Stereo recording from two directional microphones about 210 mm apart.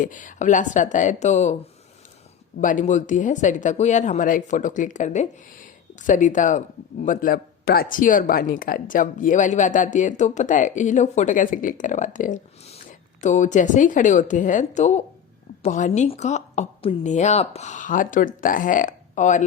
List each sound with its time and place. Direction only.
0.0 s speech: 40° left (ahead or behind)
2.6 s speech: 35° left (ahead or behind)